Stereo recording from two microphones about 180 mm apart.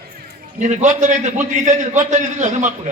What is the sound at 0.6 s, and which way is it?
A man's voice, 40° right (ahead or behind).